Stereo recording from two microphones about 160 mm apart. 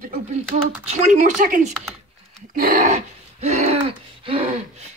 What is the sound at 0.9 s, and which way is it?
Speech, 50° right (ahead or behind).